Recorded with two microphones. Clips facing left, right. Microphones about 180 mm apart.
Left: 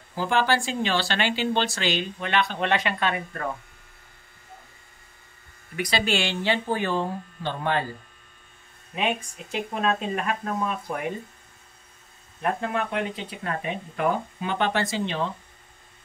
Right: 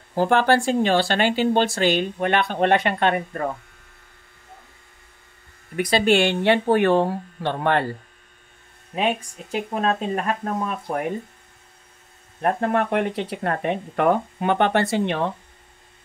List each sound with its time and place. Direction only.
0.1 s speech: 55° right (ahead or behind)
5.8 s speech: 50° right (ahead or behind)
8.9 s speech: 40° right (ahead or behind)
12.4 s speech: 50° right (ahead or behind)